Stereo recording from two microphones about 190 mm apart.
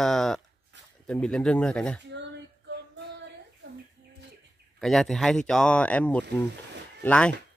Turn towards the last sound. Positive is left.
turn(degrees=5)  # may be behind; listen again after turning